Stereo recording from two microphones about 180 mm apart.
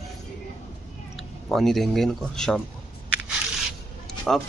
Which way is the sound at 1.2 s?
Centre (ahead or behind).